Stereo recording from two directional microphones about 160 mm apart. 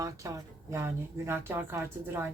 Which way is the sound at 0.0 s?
20° right (ahead or behind).